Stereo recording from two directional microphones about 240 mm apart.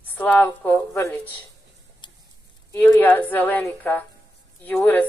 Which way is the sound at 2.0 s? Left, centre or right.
Centre.